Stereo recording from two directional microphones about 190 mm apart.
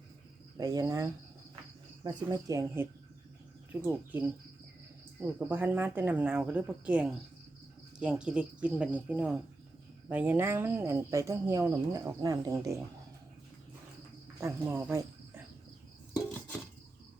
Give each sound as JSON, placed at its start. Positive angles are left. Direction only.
{"t": 0.5, "sound": "cricket", "side_deg": -20}
{"t": 2.0, "sound": "speech", "side_deg": -20}
{"t": 5.2, "sound": "speech", "side_deg": -10}
{"t": 14.4, "sound": "speech", "side_deg": -15}